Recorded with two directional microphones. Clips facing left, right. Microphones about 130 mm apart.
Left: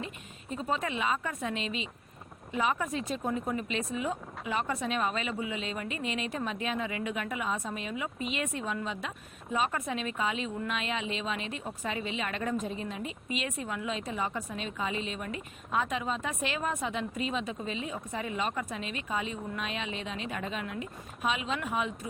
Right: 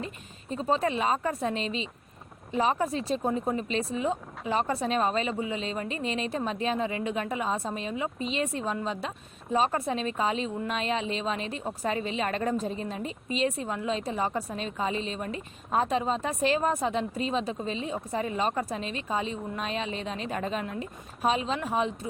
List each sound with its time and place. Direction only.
0.5 s speech: 30° right (ahead or behind)